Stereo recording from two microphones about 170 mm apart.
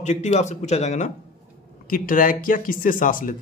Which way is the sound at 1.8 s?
55° left (ahead or behind).